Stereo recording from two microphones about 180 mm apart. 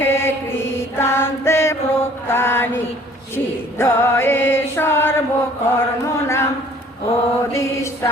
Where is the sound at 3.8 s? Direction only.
15° left (ahead or behind).